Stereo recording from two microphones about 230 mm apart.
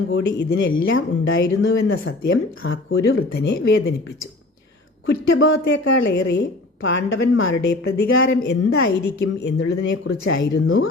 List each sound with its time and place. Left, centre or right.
0.1 s a woman's voice: left
5.0 s a woman's voice: left